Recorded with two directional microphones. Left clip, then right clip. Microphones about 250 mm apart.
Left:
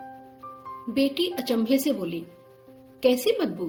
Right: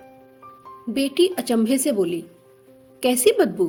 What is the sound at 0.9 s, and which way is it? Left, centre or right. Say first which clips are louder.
A woman's voice: right 5 dB; right.